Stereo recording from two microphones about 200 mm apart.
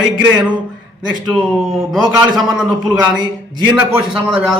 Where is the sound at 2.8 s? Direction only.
20° right (ahead or behind).